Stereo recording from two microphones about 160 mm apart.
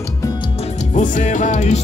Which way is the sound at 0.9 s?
50° left (ahead or behind).